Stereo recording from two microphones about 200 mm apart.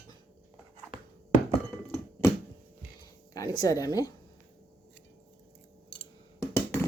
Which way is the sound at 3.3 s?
15° left (ahead or behind).